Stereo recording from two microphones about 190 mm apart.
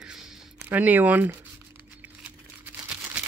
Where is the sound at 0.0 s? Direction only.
5° right (ahead or behind).